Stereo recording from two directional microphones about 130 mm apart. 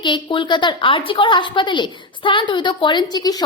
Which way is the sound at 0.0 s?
35° left (ahead or behind).